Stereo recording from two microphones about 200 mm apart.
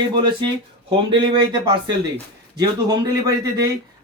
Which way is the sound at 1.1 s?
20° right (ahead or behind).